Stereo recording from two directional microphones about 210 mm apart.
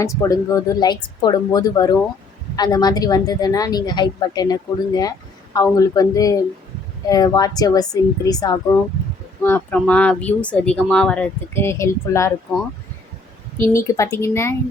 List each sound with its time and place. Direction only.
0.0 s a woman's voice: 15° left (ahead or behind)
13.7 s speech: 15° left (ahead or behind)